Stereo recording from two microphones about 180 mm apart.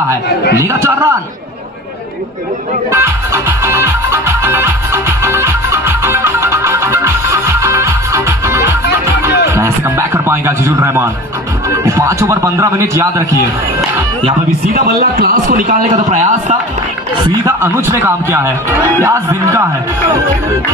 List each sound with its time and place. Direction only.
0.6 s a man's voice: 15° right (ahead or behind)
2.9 s music: 15° right (ahead or behind)
11.8 s a man's voice: 15° right (ahead or behind)
14.7 s a man's voice: 60° right (ahead or behind); by 16.5 s 45° right (ahead or behind)
17.5 s a man's voice: 15° right (ahead or behind)